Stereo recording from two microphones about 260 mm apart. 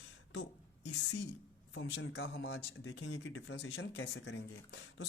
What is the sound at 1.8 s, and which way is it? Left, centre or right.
Speech, left.